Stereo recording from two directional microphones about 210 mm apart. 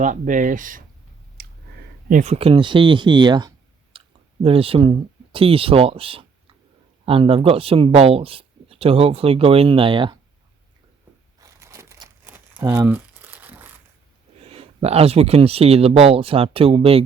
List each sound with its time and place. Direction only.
0.0 s speech: 40° right (ahead or behind)
1.4 s a sound: 45° right (ahead or behind)
2.0 s speech: 35° right (ahead or behind)
3.9 s clicking: 25° right (ahead or behind)
4.4 s speech: 25° right (ahead or behind)
11.3 s crumpling: 15° right (ahead or behind)
14.4 s speech: 30° right (ahead or behind)